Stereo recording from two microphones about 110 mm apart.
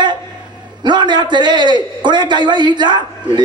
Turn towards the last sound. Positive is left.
turn(degrees=-45)  # may be behind; listen again after turning